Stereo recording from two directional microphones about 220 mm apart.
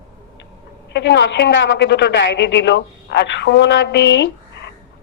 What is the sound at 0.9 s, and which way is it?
A woman's voice, 55° left (ahead or behind).